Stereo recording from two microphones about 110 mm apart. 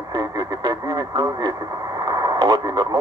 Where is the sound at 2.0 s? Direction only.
35° right (ahead or behind).